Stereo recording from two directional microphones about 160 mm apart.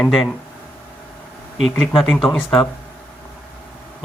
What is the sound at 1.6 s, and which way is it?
Speech, 5° left (ahead or behind).